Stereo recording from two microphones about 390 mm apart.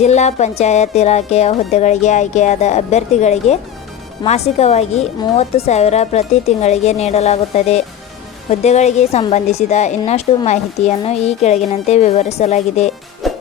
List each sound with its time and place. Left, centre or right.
0.0 s a woman's voice: centre
13.2 s music: centre